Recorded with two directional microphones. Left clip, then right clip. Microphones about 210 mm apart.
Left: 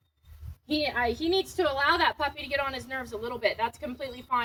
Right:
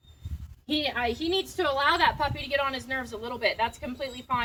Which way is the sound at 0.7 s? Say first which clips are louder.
Even; 5° right (ahead or behind).